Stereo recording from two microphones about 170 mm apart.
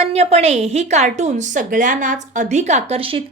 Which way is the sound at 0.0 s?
35° right (ahead or behind).